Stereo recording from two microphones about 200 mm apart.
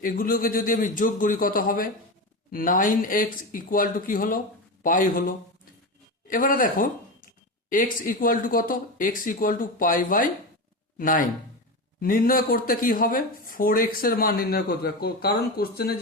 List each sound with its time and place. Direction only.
0.0 s speech: 45° left (ahead or behind)
6.2 s speech: 45° left (ahead or behind)